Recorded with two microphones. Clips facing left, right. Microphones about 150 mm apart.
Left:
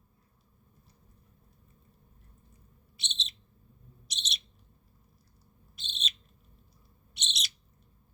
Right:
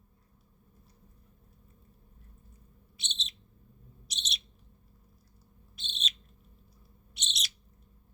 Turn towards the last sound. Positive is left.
turn(degrees=0)  # may be behind; listen again after turning